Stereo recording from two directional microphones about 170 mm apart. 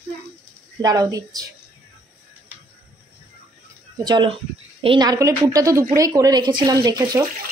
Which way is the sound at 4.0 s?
25° right (ahead or behind).